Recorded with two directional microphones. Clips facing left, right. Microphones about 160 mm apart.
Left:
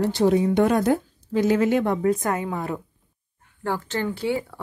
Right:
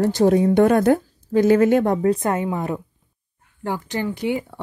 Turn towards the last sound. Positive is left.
turn(degrees=-15)  # may be behind; listen again after turning